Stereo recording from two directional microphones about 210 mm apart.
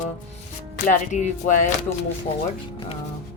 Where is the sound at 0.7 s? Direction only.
35° left (ahead or behind).